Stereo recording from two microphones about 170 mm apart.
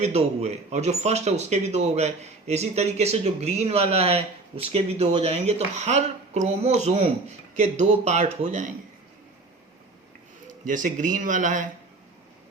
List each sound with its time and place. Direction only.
0.0 s speech: 40° right (ahead or behind)
10.7 s speech: 50° right (ahead or behind)